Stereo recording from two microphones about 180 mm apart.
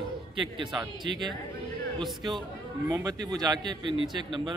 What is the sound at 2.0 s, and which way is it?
Speech, centre (ahead or behind).